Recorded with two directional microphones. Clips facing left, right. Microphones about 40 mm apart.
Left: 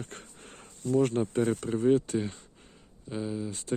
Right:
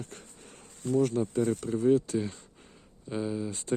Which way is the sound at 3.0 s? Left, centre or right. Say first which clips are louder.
Right 2 dB; centre.